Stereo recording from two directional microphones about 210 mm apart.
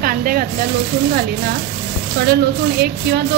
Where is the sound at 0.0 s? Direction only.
45° right (ahead or behind).